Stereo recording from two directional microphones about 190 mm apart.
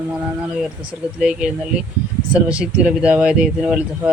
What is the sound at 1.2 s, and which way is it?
Speech, 5° right (ahead or behind).